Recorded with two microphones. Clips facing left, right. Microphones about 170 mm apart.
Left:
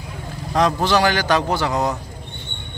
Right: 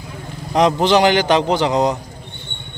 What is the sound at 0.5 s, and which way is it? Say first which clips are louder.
A man's voice: right 4 dB; 20° right (ahead or behind).